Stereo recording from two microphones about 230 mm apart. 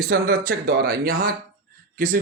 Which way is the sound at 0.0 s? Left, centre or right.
Right.